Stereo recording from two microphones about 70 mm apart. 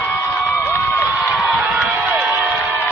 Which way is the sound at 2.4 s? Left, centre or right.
Right.